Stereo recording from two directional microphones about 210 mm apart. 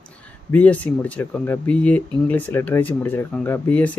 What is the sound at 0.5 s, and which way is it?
Speech, 5° left (ahead or behind).